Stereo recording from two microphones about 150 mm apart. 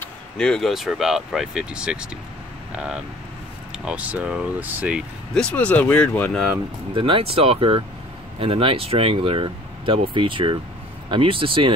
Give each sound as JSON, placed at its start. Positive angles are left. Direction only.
{"t": 0.0, "sound": "speech", "side_deg": 5}
{"t": 5.3, "sound": "speech", "side_deg": 5}
{"t": 7.0, "sound": "speech", "side_deg": -35}